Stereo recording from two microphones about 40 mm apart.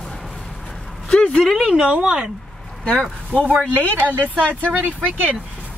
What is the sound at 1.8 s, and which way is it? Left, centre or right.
Speech, right.